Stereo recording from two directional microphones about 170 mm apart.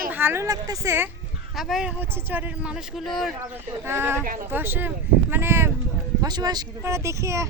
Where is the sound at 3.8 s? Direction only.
15° right (ahead or behind).